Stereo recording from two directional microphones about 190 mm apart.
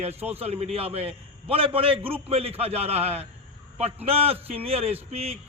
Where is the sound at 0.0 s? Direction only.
35° right (ahead or behind).